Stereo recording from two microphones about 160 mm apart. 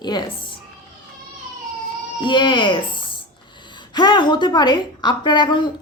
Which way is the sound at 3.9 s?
30° left (ahead or behind).